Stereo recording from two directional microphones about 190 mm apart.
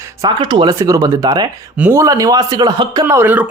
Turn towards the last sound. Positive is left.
turn(degrees=-10)  # may be behind; listen again after turning